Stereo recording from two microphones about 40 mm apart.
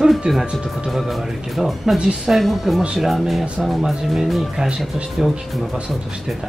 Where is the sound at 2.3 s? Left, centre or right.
Centre.